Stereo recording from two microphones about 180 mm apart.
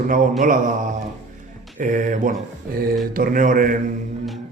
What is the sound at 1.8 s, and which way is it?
A man's voice, 45° right (ahead or behind).